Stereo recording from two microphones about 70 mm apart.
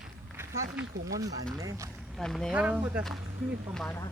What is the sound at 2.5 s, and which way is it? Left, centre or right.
Speech, centre.